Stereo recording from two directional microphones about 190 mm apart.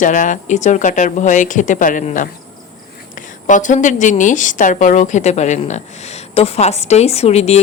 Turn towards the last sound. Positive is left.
turn(degrees=35)  # may be behind; listen again after turning